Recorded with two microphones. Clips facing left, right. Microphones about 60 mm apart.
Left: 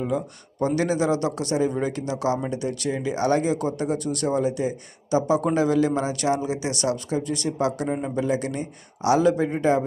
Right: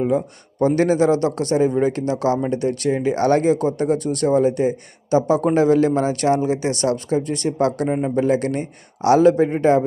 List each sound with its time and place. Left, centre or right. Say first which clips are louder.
0.0 s a man's voice: right 6 dB; right